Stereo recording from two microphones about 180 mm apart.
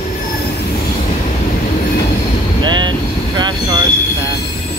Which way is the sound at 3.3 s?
25° right (ahead or behind).